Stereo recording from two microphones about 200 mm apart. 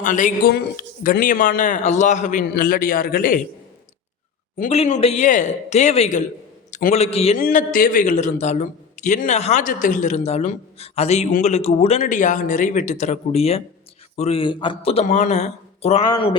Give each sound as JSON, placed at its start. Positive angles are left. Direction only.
{"t": 0.0, "sound": "a man's voice", "side_deg": 40}
{"t": 4.5, "sound": "a man's voice", "side_deg": 35}
{"t": 7.3, "sound": "a man's voice", "side_deg": 45}